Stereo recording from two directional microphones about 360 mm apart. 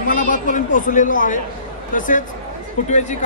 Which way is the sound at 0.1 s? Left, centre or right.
Left.